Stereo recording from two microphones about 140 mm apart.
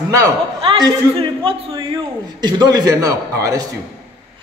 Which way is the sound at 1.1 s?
35° right (ahead or behind).